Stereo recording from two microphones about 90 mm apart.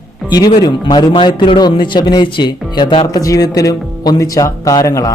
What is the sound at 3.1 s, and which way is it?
Speech, 40° left (ahead or behind).